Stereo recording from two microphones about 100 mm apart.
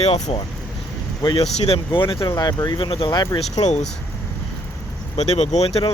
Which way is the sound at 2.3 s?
40° left (ahead or behind).